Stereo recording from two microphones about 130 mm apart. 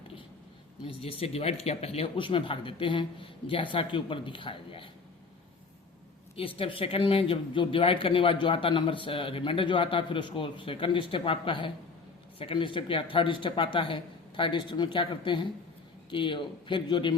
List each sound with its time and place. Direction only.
0.9 s speech: 50° left (ahead or behind)
6.3 s speech: 45° left (ahead or behind)